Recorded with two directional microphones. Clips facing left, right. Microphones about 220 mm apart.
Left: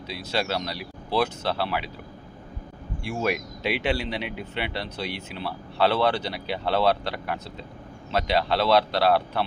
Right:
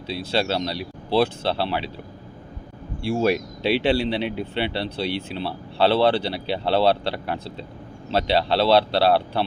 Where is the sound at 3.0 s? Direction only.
30° right (ahead or behind).